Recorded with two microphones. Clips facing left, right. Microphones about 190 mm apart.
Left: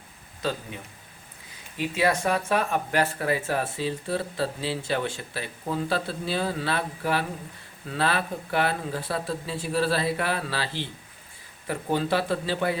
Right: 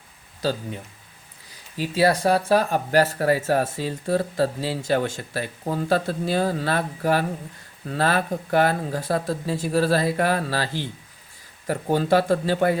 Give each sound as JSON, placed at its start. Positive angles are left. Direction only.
{"t": 1.7, "sound": "speech", "side_deg": -35}